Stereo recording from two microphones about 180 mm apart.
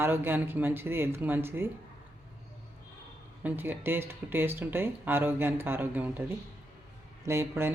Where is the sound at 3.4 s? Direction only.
10° right (ahead or behind).